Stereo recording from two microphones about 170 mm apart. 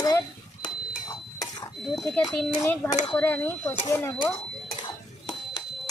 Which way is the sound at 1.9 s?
Centre (ahead or behind).